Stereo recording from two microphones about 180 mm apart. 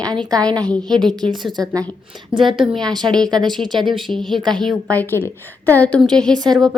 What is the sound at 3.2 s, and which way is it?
Speech, 20° right (ahead or behind).